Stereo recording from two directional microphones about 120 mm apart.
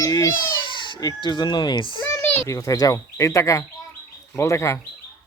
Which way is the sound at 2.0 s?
20° left (ahead or behind).